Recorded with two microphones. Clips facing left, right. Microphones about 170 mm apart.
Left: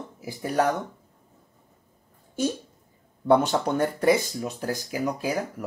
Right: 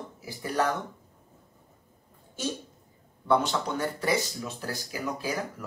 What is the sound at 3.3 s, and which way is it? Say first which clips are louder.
Speech: left 5 dB; 50° left (ahead or behind).